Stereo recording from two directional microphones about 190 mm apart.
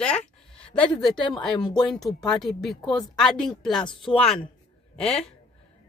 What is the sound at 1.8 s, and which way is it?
Speech, centre (ahead or behind).